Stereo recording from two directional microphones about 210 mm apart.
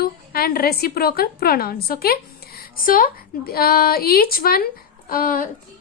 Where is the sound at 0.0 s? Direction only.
45° left (ahead or behind).